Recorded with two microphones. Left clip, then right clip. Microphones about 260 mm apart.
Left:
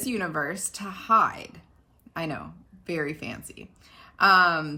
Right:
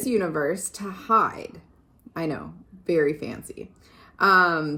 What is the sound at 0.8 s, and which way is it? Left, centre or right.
Speech, left.